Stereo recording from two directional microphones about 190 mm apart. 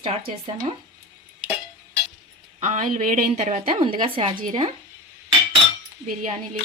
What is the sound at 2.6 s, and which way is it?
A woman's voice, 40° right (ahead or behind).